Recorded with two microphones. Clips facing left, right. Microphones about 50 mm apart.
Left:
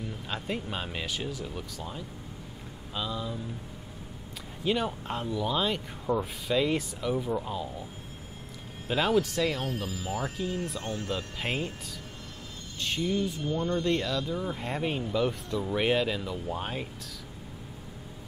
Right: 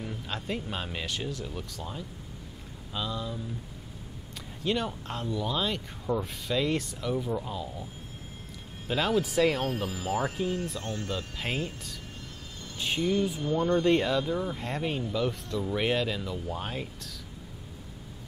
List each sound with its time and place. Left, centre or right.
0.3 s speech: centre
4.6 s speech: centre
8.8 s speech: centre
9.2 s speech: centre
10.8 s speech: centre
12.7 s speech: centre
14.4 s speech: centre